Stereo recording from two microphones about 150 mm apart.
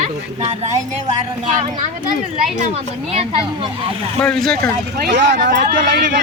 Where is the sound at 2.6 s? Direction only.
45° right (ahead or behind).